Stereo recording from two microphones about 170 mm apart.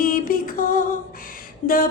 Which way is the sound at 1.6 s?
50° left (ahead or behind).